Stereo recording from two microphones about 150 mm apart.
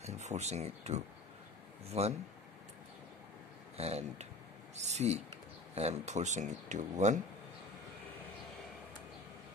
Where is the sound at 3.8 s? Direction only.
45° right (ahead or behind).